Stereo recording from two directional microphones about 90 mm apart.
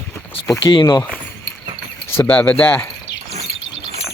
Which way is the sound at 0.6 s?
60° left (ahead or behind).